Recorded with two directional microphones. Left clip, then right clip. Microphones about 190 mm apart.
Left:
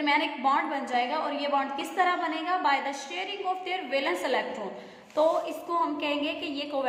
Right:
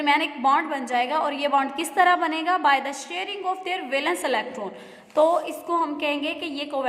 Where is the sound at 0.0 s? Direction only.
35° right (ahead or behind).